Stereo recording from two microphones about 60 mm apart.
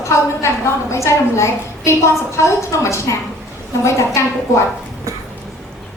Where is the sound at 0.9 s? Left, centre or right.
Left.